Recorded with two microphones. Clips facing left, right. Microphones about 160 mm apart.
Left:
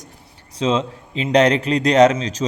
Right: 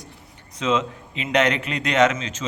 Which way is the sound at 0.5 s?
30° left (ahead or behind).